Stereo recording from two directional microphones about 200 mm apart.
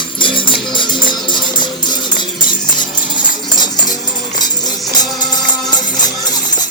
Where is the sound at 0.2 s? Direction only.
25° left (ahead or behind).